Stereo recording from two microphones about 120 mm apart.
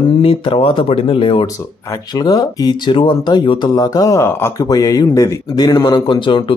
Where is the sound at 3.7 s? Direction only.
30° left (ahead or behind).